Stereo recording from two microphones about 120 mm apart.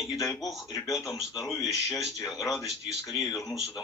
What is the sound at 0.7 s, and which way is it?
Speech, 30° left (ahead or behind).